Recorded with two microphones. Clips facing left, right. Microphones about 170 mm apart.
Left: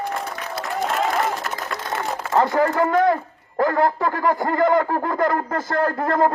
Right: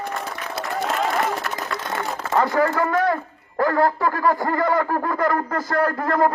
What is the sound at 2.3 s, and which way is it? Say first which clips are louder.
A man's voice: left 1 dB; 20° left (ahead or behind).